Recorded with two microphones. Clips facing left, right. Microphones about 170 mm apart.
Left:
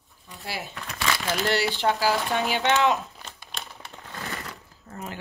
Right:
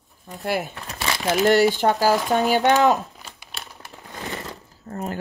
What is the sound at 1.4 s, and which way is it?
Speech, 45° right (ahead or behind).